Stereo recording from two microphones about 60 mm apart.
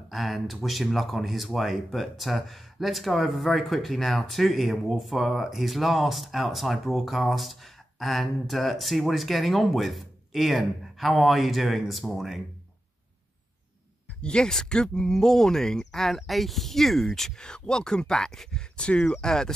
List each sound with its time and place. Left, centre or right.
0.1 s speech: centre
14.2 s speech: centre